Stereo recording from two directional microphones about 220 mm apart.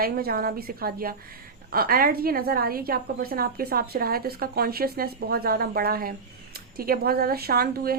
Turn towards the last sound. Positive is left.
turn(degrees=-45)  # may be behind; listen again after turning